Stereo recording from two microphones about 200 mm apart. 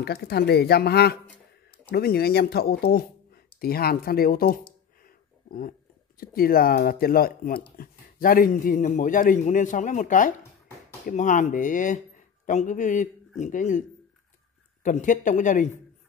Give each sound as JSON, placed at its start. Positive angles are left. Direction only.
{"t": 0.0, "sound": "speech", "side_deg": 55}